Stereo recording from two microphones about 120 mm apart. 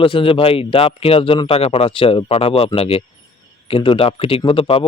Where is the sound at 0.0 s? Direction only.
45° left (ahead or behind).